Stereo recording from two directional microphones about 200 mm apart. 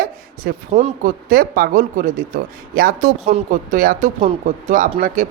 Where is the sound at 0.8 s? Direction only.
40° right (ahead or behind).